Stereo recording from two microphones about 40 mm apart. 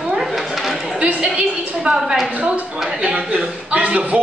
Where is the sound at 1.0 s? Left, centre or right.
Right.